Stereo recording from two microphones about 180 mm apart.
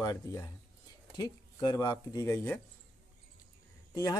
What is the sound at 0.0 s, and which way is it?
Speech, 20° left (ahead or behind).